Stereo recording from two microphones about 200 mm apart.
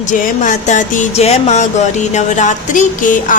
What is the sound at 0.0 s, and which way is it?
Music, 40° left (ahead or behind).